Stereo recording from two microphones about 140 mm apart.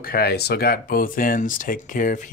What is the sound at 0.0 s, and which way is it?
Speech, 90° left.